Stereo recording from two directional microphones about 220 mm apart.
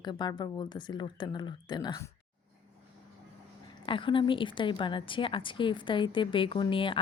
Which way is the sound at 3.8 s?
20° left (ahead or behind).